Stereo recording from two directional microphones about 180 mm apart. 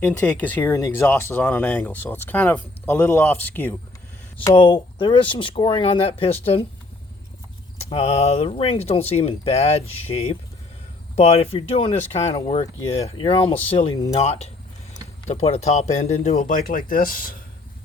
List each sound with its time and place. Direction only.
0.0 s speech: 10° left (ahead or behind)
4.4 s speech: 25° left (ahead or behind)
7.8 s speech: 35° left (ahead or behind); by 17.3 s 50° left (ahead or behind)